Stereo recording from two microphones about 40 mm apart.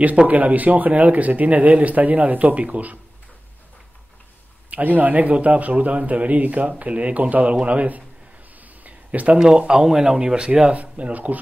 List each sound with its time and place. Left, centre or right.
0.3 s speech: right
4.6 s speech: right
8.5 s a sound: right
9.7 s speech: centre
10.1 s speech: right
10.7 s speech: right